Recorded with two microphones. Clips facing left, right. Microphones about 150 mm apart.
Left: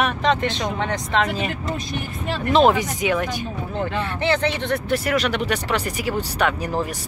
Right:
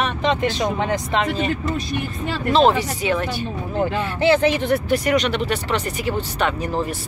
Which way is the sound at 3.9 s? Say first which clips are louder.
Right 5 dB; 10° right (ahead or behind).